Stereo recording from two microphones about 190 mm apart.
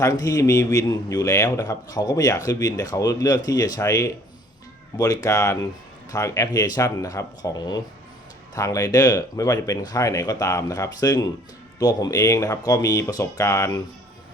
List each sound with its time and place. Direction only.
0.0 s a man's voice: 20° left (ahead or behind)